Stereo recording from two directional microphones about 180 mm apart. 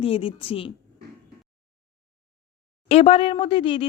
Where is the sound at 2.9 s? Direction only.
30° left (ahead or behind).